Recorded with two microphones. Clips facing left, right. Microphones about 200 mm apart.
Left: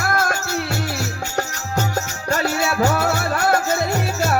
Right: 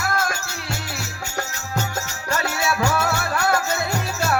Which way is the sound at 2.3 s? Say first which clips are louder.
Left 3 dB; 35° left (ahead or behind).